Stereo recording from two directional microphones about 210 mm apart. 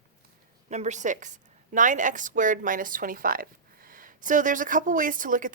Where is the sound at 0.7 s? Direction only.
35° right (ahead or behind).